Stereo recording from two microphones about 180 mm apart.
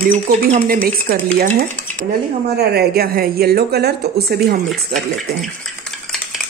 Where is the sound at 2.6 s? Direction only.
60° right (ahead or behind).